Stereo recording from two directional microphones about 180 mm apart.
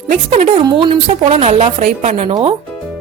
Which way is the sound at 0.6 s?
30° right (ahead or behind).